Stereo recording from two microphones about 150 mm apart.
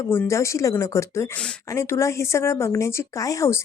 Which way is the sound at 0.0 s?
15° left (ahead or behind).